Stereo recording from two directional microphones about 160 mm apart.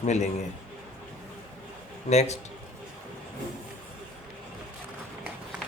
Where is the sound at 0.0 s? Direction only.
45° left (ahead or behind).